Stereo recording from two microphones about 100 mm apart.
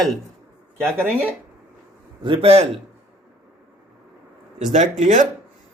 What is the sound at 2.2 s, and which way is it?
Speech, 70° right (ahead or behind).